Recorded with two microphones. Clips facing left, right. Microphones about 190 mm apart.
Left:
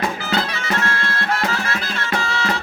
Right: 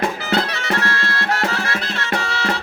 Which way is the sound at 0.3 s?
70° right (ahead or behind).